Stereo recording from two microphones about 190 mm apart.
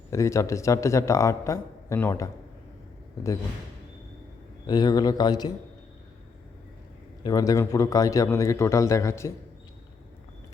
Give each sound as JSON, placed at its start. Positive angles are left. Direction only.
{"t": 0.1, "sound": "speech", "side_deg": 15}
{"t": 4.6, "sound": "speech", "side_deg": 20}
{"t": 7.3, "sound": "speech", "side_deg": 20}